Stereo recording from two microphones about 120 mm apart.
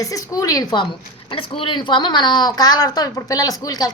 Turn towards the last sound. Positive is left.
turn(degrees=30)  # may be behind; listen again after turning